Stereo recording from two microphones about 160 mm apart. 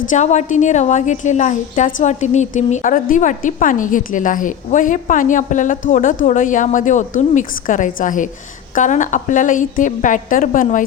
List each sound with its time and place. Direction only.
0.1 s a woman's voice: 45° left (ahead or behind)